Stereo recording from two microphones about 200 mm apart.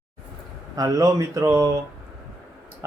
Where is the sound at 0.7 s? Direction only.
15° right (ahead or behind).